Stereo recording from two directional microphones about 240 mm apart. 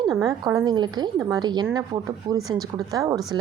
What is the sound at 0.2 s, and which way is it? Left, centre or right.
A woman's voice, centre.